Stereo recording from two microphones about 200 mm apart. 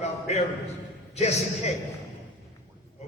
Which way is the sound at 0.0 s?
35° left (ahead or behind).